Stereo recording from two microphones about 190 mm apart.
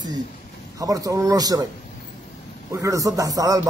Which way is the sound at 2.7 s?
15° right (ahead or behind).